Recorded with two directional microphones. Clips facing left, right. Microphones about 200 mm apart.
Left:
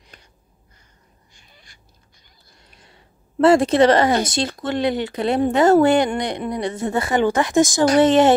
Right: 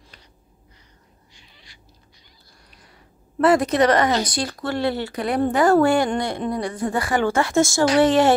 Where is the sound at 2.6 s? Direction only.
25° left (ahead or behind).